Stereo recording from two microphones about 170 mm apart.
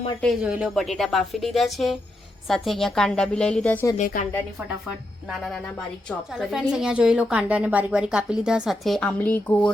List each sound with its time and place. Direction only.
0.4 s a woman's voice: 5° right (ahead or behind)
3.9 s a woman's voice: 50° left (ahead or behind)
5.3 s a woman's voice: centre (ahead or behind)